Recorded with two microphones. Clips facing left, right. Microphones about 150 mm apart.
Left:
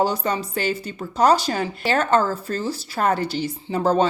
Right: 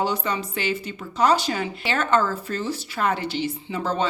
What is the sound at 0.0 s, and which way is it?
Speech, 40° left (ahead or behind).